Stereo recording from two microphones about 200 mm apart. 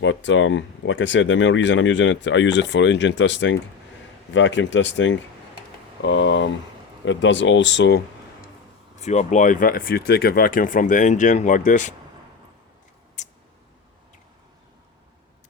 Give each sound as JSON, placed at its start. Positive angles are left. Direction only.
{"t": 0.0, "sound": "speech", "side_deg": 70}
{"t": 9.0, "sound": "speech", "side_deg": 35}
{"t": 13.2, "sound": "a sound", "side_deg": 35}